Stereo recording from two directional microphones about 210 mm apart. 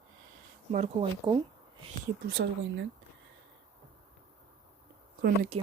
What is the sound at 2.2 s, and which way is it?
Speech, 50° right (ahead or behind).